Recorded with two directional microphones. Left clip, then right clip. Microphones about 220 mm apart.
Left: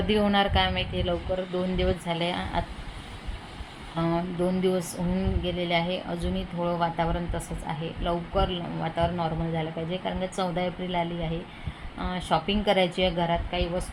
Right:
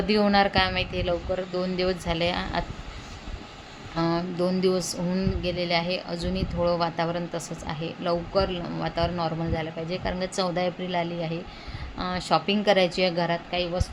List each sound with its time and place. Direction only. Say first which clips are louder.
0.1 s a woman's voice: right 2 dB; 20° right (ahead or behind)
3.9 s a woman's voice: right 2 dB; 20° right (ahead or behind)